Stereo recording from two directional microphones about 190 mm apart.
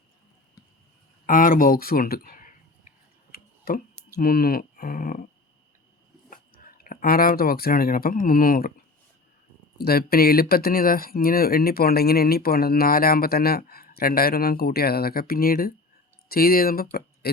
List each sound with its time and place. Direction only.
1.3 s speech: 45° left (ahead or behind)
3.3 s a sound: 55° left (ahead or behind)
4.2 s speech: 50° left (ahead or behind)
6.3 s speech: 50° left (ahead or behind)
9.7 s speech: 55° left (ahead or behind)